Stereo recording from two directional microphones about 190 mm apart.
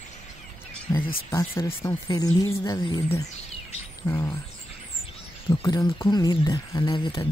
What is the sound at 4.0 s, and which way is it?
Bird, 15° left (ahead or behind).